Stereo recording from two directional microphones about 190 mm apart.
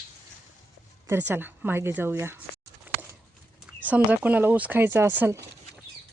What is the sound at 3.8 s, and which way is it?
Speech, 10° right (ahead or behind).